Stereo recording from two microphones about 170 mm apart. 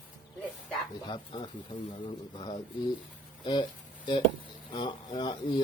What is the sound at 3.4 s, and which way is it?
Speech, 25° left (ahead or behind).